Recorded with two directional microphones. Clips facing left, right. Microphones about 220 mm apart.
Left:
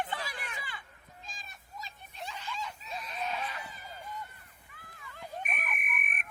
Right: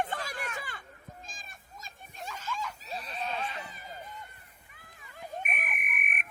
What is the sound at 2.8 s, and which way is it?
Neigh, 35° right (ahead or behind).